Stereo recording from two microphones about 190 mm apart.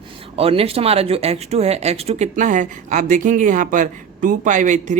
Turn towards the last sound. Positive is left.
turn(degrees=-40)  # may be behind; listen again after turning